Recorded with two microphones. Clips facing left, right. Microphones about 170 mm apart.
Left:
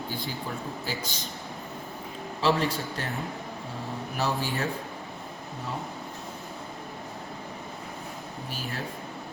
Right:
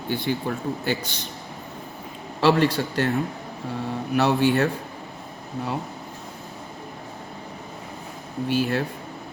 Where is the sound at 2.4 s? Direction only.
70° right (ahead or behind).